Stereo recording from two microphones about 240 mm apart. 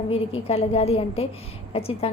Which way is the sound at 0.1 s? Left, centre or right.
Left.